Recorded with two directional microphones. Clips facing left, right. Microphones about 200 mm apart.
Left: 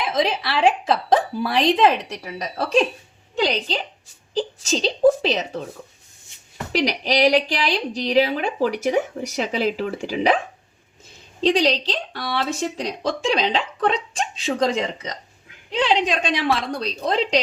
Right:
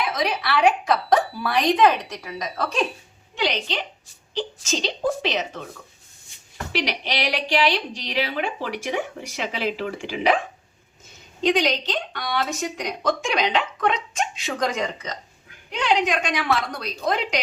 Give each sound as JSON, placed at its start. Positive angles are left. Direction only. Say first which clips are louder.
{"t": 0.0, "sound": "a woman's voice", "louder": "left 3 dB", "side_deg": 25}
{"t": 6.7, "sound": "speech", "louder": "left 6 dB", "side_deg": 40}
{"t": 11.3, "sound": "speech", "louder": "left 2 dB", "side_deg": 35}